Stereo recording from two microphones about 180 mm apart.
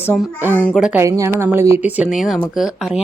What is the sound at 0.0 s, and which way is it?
Speech, 5° right (ahead or behind).